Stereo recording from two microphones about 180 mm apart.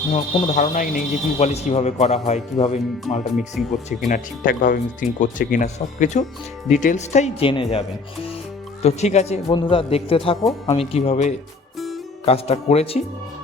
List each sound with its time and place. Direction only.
0.1 s speech: 40° left (ahead or behind)
4.1 s speech: 50° left (ahead or behind); by 13.0 s 35° left (ahead or behind)